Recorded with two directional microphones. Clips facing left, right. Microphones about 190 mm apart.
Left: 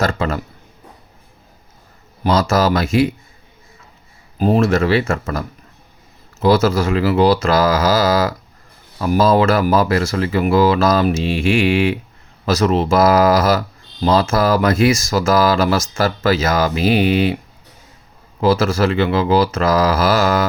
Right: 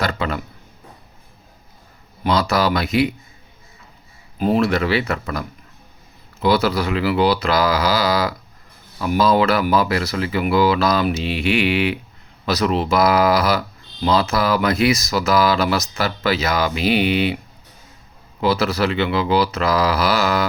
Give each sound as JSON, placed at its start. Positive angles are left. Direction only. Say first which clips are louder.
{"t": 2.2, "sound": "speech", "louder": "left 3 dB", "side_deg": 45}
{"t": 4.4, "sound": "speech", "louder": "left 3 dB", "side_deg": 40}
{"t": 6.5, "sound": "speech", "louder": "left 4 dB", "side_deg": 45}
{"t": 18.3, "sound": "speech", "louder": "left 4 dB", "side_deg": 45}